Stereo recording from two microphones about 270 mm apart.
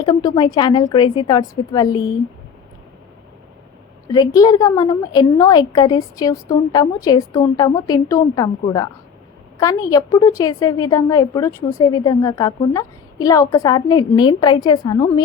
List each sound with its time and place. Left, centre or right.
0.0 s a woman's voice: centre
4.1 s a woman's voice: centre